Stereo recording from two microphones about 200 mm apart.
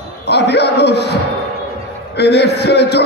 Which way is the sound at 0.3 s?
55° left (ahead or behind).